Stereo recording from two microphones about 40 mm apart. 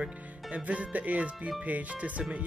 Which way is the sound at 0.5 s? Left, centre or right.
Right.